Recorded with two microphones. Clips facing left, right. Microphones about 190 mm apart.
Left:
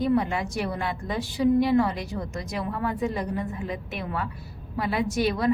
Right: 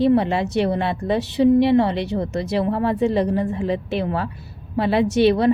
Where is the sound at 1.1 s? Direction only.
70° right (ahead or behind).